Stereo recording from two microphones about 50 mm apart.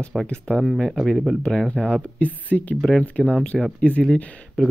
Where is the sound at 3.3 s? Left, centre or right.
Centre.